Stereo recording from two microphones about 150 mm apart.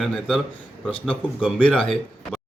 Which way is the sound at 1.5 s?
10° left (ahead or behind).